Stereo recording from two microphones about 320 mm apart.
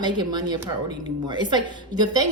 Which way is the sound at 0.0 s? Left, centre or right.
Centre.